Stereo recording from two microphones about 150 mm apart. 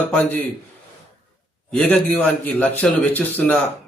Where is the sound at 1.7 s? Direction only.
5° left (ahead or behind).